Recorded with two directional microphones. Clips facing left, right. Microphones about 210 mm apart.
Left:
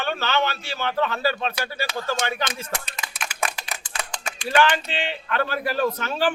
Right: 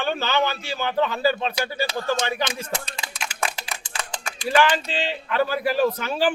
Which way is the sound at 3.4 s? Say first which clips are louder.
Right 1 dB; 30° right (ahead or behind).